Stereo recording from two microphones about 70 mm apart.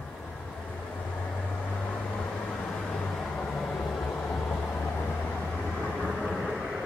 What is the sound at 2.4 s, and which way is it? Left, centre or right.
Vehicle, centre.